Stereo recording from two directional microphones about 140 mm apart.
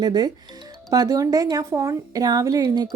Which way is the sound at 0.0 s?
30° right (ahead or behind).